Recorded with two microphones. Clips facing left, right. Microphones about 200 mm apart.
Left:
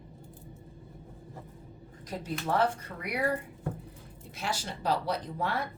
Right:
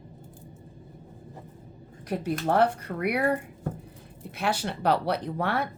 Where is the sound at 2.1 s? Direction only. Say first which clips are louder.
Right 6 dB; 65° right (ahead or behind).